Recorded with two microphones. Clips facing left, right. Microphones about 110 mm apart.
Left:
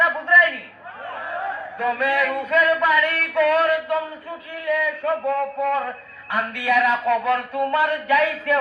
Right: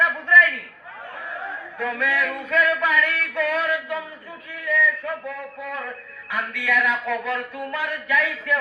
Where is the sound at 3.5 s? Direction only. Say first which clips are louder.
Left 6 dB; 50° left (ahead or behind).